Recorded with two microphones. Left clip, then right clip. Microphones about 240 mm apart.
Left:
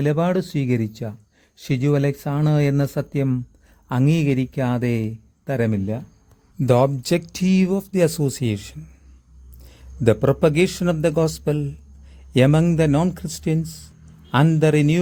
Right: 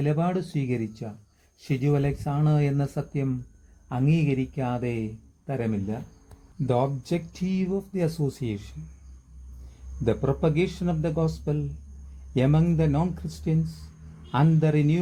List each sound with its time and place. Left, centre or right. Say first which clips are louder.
0.0 s speech: left 7 dB; left
10.0 s speech: left 8 dB; left